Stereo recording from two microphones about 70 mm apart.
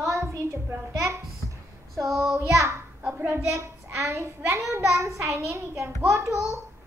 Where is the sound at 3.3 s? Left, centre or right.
Right.